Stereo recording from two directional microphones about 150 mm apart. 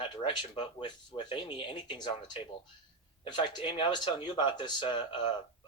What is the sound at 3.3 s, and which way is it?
Speech, 30° left (ahead or behind).